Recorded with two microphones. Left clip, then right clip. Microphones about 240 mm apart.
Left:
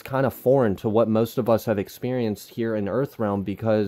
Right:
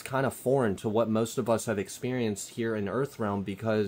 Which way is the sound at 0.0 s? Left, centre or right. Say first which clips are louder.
Left 6 dB; left.